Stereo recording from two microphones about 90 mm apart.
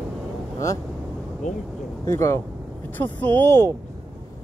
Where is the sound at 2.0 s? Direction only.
30° left (ahead or behind).